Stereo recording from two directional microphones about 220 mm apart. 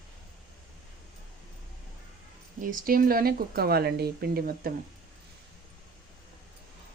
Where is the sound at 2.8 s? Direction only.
40° right (ahead or behind).